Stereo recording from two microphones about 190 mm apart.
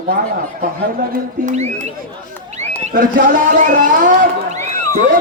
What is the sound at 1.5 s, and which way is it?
Speech, 35° right (ahead or behind).